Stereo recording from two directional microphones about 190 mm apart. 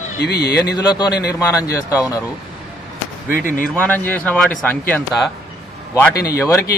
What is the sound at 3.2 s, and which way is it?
Speech, 45° left (ahead or behind).